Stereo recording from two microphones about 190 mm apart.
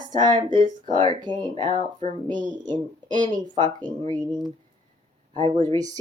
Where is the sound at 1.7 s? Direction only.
35° right (ahead or behind).